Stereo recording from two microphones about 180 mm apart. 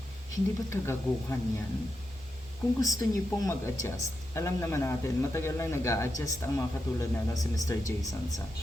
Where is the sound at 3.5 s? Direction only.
15° left (ahead or behind).